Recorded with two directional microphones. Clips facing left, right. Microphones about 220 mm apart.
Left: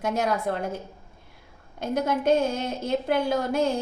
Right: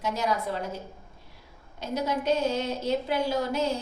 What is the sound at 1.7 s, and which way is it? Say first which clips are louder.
A woman's voice: left 3 dB; 50° left (ahead or behind).